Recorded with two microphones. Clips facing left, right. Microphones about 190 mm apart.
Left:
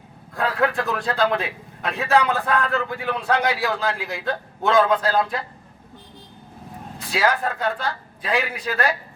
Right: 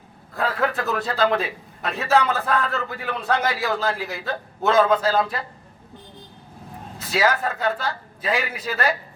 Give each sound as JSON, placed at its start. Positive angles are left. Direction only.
{"t": 0.3, "sound": "a man's voice", "side_deg": 0}
{"t": 7.0, "sound": "a man's voice", "side_deg": 0}